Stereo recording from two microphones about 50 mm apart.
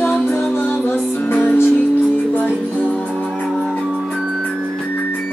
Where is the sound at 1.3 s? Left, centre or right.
Left.